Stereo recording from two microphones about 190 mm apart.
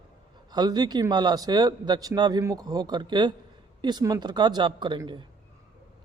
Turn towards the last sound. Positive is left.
turn(degrees=-25)  # may be behind; listen again after turning